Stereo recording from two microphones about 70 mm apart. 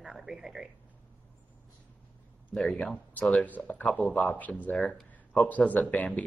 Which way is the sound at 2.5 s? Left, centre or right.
Centre.